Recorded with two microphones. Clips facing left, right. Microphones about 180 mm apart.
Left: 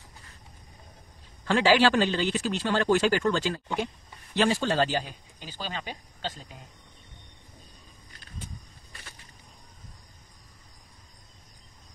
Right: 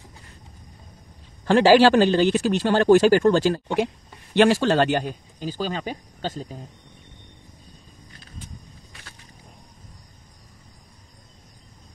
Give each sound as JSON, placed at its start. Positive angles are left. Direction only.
{"t": 1.4, "sound": "a man's voice", "side_deg": -40}
{"t": 3.6, "sound": "a man's voice", "side_deg": -75}
{"t": 5.4, "sound": "speech", "side_deg": -40}